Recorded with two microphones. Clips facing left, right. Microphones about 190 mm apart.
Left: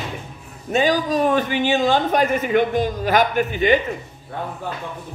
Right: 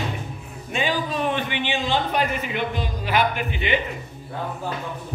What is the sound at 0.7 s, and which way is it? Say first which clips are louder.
A man's voice: left 7 dB; 40° left (ahead or behind).